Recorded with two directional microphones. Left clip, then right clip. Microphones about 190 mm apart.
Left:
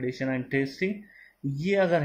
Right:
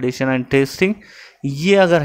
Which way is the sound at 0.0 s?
35° right (ahead or behind).